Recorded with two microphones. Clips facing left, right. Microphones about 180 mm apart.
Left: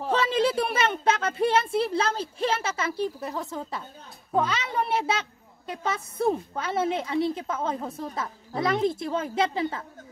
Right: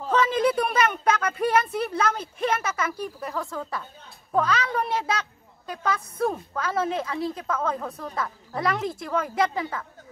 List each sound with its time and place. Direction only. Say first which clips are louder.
0.1 s a woman's voice: right 2 dB; 30° left (ahead or behind)